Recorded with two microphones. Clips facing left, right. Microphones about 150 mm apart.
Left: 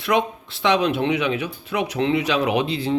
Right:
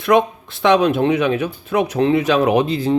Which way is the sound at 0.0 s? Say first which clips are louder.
Right 6 dB; 50° right (ahead or behind).